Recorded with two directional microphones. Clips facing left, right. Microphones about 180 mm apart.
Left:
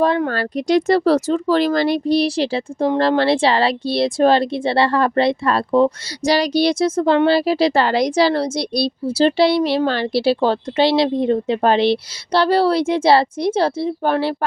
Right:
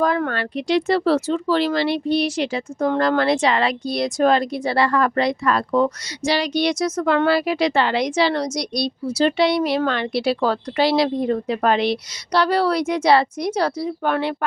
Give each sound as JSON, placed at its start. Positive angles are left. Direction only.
{"t": 0.3, "sound": "a woman's voice", "side_deg": 40}
{"t": 6.2, "sound": "a woman's voice", "side_deg": 40}